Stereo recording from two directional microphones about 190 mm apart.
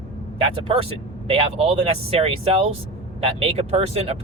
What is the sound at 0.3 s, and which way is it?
Speech, 30° right (ahead or behind).